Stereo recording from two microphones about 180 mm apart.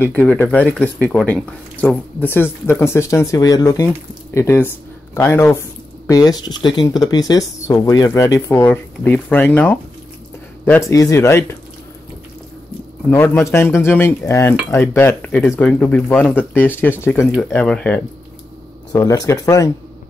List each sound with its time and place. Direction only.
0.0 s speech: 10° left (ahead or behind)
13.1 s speech: 15° left (ahead or behind)
18.9 s speech: 20° left (ahead or behind)